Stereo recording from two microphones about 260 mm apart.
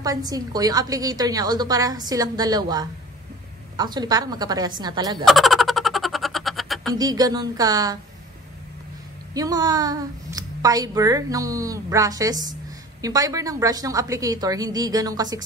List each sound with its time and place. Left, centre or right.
0.0 s a woman's voice: centre
5.2 s a sound: centre
6.9 s a woman's voice: centre
9.3 s a woman's voice: centre